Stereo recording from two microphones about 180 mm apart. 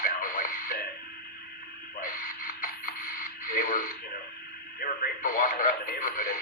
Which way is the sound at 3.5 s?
50° left (ahead or behind).